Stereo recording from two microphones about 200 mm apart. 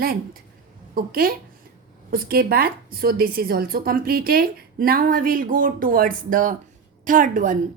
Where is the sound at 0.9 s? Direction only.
45° right (ahead or behind).